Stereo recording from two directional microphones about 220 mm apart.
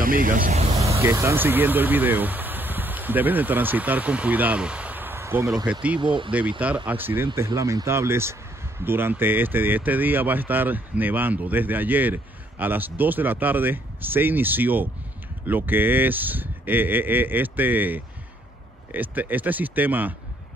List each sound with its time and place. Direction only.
0.0 s speech: 40° right (ahead or behind)
1.0 s speech: 10° right (ahead or behind)
5.9 s speech: 20° right (ahead or behind)
6.9 s speech: 10° right (ahead or behind)